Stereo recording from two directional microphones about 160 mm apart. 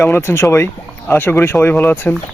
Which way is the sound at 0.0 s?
15° left (ahead or behind).